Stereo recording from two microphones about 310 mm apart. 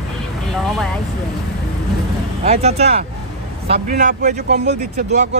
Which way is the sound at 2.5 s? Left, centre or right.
Centre.